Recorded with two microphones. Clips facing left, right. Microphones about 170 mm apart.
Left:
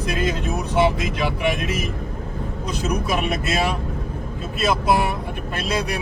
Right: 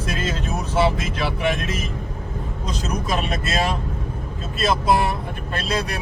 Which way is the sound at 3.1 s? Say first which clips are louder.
Left 2 dB; 10° left (ahead or behind).